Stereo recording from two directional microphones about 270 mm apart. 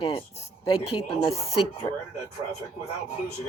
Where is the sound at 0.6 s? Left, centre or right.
Centre.